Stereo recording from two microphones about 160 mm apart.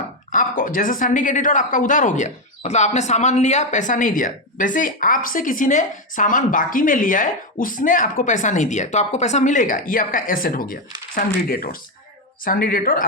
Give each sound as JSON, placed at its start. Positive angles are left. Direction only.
{"t": 0.3, "sound": "speech", "side_deg": 55}